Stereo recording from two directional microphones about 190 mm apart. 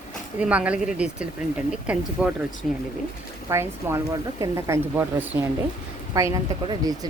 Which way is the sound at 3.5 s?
15° right (ahead or behind).